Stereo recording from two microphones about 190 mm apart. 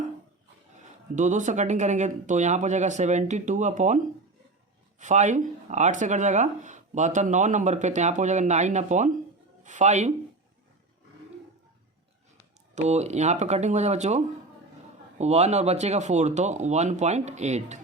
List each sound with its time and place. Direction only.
1.1 s speech: 40° right (ahead or behind)
12.7 s speech: 35° right (ahead or behind)